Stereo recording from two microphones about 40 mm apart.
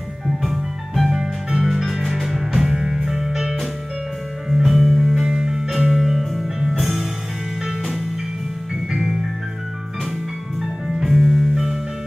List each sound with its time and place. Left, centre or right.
0.3 s music: centre
8.9 s music: centre
10.6 s music: centre